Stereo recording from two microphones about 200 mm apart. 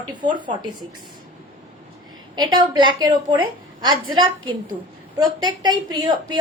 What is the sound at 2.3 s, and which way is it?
A woman's voice, 20° right (ahead or behind).